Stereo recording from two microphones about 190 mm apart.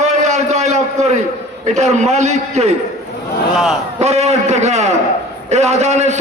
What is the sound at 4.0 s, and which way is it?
A man's voice, 35° right (ahead or behind).